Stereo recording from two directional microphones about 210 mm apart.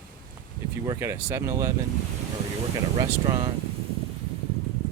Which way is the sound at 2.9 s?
20° right (ahead or behind).